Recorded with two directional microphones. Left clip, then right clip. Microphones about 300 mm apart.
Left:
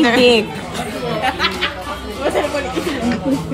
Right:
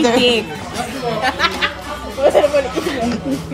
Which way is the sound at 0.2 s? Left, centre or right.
Centre.